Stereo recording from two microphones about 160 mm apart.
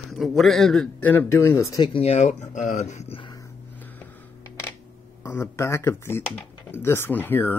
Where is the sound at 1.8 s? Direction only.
35° left (ahead or behind).